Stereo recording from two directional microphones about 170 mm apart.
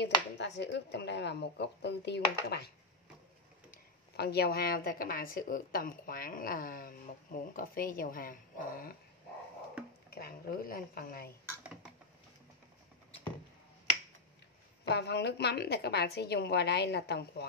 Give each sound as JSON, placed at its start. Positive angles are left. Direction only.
{"t": 0.0, "sound": "speech", "side_deg": 90}
{"t": 4.2, "sound": "speech", "side_deg": 70}
{"t": 10.0, "sound": "speech", "side_deg": 65}
{"t": 11.6, "sound": "a sound", "side_deg": -5}
{"t": 14.9, "sound": "a woman's voice", "side_deg": 80}